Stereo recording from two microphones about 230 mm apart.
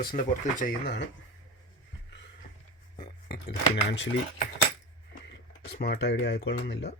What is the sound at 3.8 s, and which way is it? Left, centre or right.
Speech, left.